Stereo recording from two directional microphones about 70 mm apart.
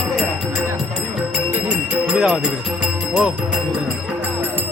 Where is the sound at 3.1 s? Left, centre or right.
Centre.